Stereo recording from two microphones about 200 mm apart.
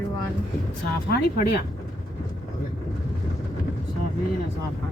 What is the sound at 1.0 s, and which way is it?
Speech, 55° left (ahead or behind).